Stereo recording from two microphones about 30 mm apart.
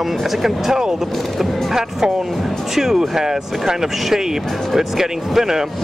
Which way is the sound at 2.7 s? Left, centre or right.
Centre.